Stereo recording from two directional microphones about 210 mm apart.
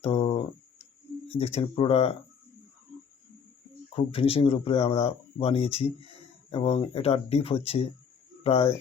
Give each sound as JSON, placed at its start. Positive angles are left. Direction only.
{"t": 0.0, "sound": "a sound", "side_deg": 30}
{"t": 1.3, "sound": "speech", "side_deg": 30}
{"t": 3.8, "sound": "speech", "side_deg": 25}